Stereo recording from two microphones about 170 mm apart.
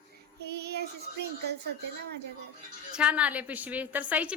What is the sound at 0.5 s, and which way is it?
Child singing, 75° right (ahead or behind).